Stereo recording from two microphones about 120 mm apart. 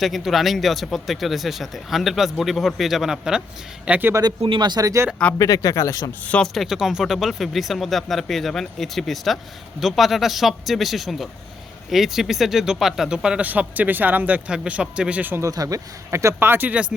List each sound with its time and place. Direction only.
0.0 s speech: centre (ahead or behind)
4.1 s speech: 35° right (ahead or behind)
5.4 s speech: 30° left (ahead or behind)
6.2 s speech: 5° left (ahead or behind); by 15.4 s 15° right (ahead or behind)
15.4 s speech: 30° right (ahead or behind); by 16.9 s 10° right (ahead or behind)